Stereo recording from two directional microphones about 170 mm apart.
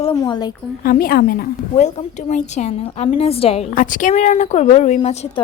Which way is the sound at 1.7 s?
40° left (ahead or behind).